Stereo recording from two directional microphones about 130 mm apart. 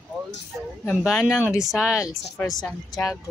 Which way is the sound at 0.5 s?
5° right (ahead or behind).